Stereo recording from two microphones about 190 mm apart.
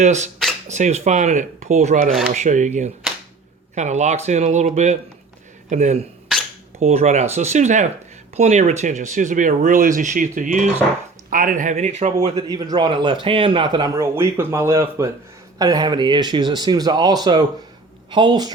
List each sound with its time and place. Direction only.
0.0 s speech: 40° right (ahead or behind)
2.0 s speech: centre (ahead or behind)
2.3 s speech: 40° right (ahead or behind); by 18.5 s 20° right (ahead or behind)